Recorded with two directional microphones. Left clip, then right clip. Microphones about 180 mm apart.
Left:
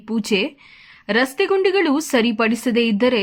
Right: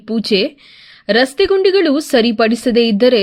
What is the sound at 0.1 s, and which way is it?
A woman's voice, 15° right (ahead or behind).